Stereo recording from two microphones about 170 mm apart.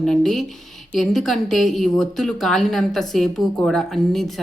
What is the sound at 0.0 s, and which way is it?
Speech, centre (ahead or behind).